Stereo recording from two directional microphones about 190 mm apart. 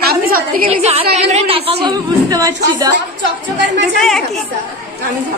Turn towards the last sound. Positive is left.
turn(degrees=0)  # may be behind; listen again after turning